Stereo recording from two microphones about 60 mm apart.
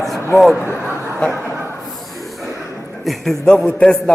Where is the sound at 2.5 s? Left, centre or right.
Right.